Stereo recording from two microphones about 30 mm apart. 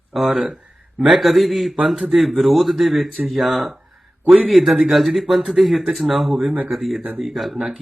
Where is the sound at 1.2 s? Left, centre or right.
Centre.